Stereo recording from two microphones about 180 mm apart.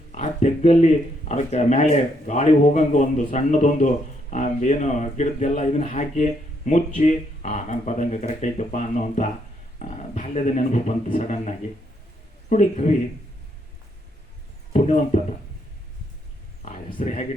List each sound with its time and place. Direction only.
0.1 s speech: 40° left (ahead or behind)
14.7 s speech: 40° left (ahead or behind)
17.0 s speech: 40° left (ahead or behind)